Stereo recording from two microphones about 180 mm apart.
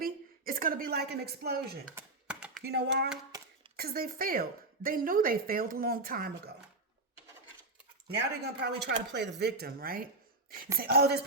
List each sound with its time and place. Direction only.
0.0 s a sound: 50° right (ahead or behind)
2.0 s computer keyboard: 5° right (ahead or behind)
2.6 s speech: 65° right (ahead or behind)
8.1 s speech: 65° right (ahead or behind)